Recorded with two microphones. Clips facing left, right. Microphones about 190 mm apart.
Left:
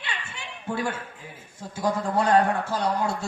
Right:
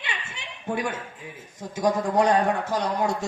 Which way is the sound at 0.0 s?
20° right (ahead or behind).